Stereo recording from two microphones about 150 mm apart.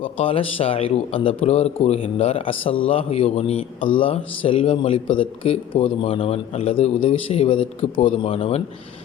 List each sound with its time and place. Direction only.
0.0 s speech: 40° left (ahead or behind)